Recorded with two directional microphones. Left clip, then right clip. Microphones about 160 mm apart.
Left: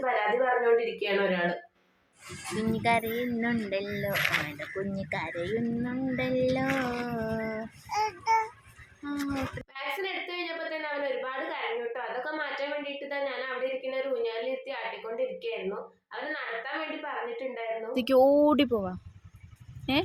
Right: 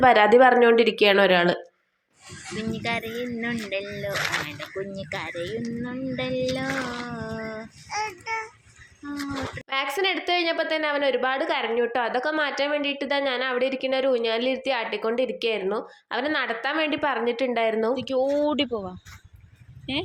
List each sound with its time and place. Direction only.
0.0 s speech: 70° right (ahead or behind)
2.6 s speech: 25° left (ahead or behind)
4.1 s speech: 50° right (ahead or behind)
4.4 s speech: 25° left (ahead or behind)
9.7 s a woman's voice: 55° right (ahead or behind)
17.9 s speech: 40° left (ahead or behind)